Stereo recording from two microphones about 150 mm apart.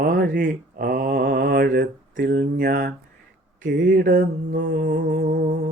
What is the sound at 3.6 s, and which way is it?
Mantra, 70° right (ahead or behind).